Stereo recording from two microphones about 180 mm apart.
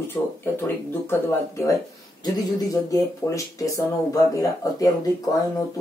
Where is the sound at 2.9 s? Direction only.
20° left (ahead or behind).